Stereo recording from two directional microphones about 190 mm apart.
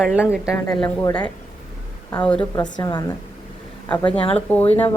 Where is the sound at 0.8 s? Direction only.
20° left (ahead or behind).